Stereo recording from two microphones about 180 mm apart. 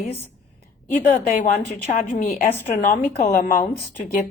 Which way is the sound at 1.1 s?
40° left (ahead or behind).